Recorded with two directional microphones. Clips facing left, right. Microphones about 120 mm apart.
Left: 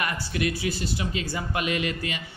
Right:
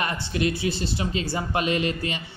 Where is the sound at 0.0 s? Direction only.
25° right (ahead or behind).